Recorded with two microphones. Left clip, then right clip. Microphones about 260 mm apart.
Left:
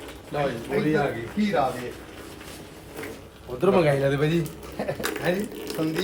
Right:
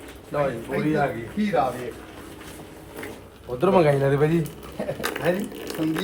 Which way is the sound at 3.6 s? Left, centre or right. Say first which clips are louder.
Right 2 dB; centre.